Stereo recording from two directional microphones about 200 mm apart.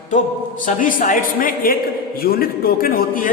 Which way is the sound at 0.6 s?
40° left (ahead or behind).